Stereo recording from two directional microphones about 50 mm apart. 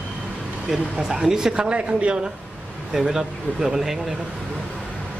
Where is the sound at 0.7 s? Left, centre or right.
Centre.